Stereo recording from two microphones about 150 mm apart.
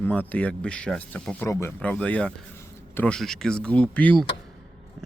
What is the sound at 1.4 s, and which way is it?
Speech, 20° left (ahead or behind).